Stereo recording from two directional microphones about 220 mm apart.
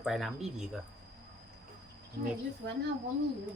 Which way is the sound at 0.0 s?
Centre (ahead or behind).